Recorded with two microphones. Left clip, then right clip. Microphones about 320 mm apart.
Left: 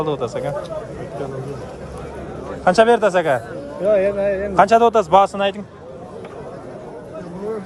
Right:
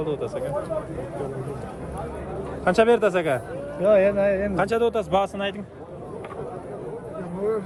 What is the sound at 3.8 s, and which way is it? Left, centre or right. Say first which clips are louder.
Speech: left 2 dB; right.